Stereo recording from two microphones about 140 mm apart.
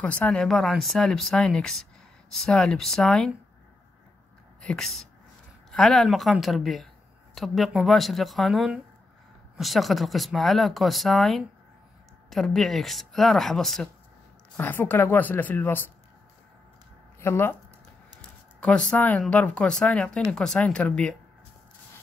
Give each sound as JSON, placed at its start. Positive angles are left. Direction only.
{"t": 0.0, "sound": "speech", "side_deg": 10}
{"t": 4.6, "sound": "speech", "side_deg": 5}
{"t": 14.6, "sound": "speech", "side_deg": 15}
{"t": 17.2, "sound": "speech", "side_deg": 15}
{"t": 18.6, "sound": "speech", "side_deg": 5}